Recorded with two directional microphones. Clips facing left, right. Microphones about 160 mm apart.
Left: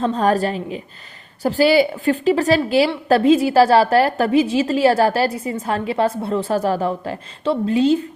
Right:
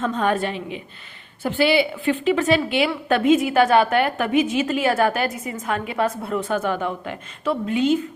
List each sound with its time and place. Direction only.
0.0 s a woman's voice: 35° left (ahead or behind)